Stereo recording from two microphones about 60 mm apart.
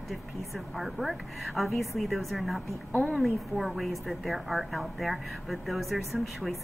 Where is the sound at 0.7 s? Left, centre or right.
Centre.